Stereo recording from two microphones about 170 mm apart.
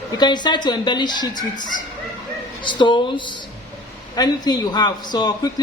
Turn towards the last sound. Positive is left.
turn(degrees=25)  # may be behind; listen again after turning